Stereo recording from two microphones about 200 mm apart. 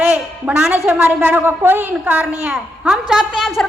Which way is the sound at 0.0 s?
5° right (ahead or behind).